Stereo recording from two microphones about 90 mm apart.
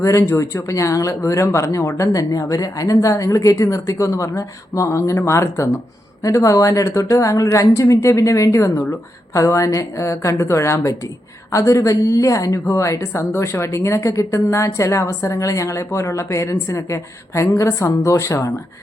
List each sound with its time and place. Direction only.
0.0 s a woman's voice: 35° left (ahead or behind)